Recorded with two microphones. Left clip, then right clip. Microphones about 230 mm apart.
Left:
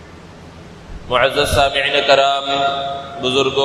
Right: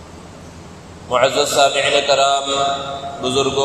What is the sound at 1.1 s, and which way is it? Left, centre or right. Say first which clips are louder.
A man's voice: even; left.